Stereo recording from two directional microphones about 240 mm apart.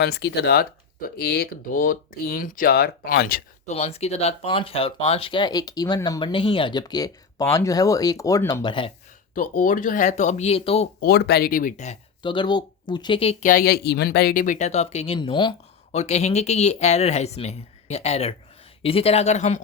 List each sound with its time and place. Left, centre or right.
0.0 s speech: left
3.8 s speech: left
9.3 s speech: left
11.0 s speech: left